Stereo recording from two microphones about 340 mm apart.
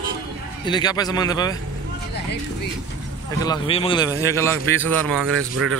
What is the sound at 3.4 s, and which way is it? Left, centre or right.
A man's voice, centre.